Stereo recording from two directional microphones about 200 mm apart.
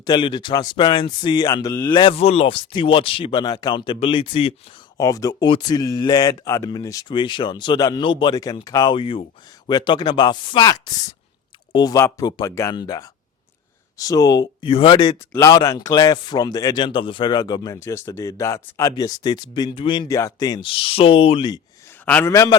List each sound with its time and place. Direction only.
0.0 s a man's voice: 20° left (ahead or behind)
22.0 s a man's voice: 10° left (ahead or behind)